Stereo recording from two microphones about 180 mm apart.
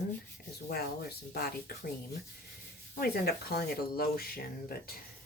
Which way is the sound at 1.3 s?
60° left (ahead or behind).